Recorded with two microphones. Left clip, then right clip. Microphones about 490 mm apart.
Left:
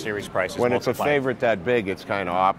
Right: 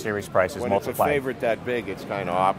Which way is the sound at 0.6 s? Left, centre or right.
Left.